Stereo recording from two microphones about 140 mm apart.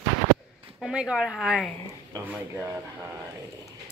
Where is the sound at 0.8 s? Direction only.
5° right (ahead or behind).